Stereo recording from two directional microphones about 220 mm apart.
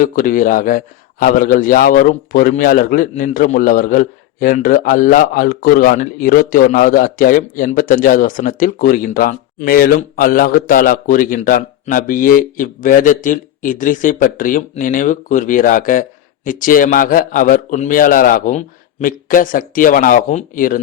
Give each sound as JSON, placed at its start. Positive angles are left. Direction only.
{"t": 0.0, "sound": "speech", "side_deg": 40}